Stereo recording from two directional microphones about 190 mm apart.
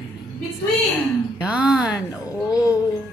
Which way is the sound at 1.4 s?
5° right (ahead or behind).